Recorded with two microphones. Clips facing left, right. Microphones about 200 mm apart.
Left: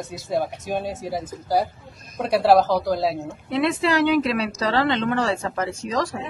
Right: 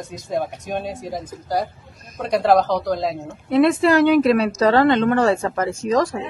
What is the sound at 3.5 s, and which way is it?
Speech, 50° right (ahead or behind).